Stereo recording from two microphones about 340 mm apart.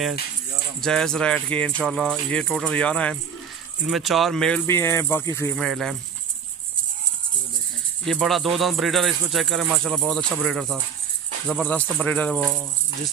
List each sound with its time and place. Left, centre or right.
0.7 s speech: centre
8.0 s speech: centre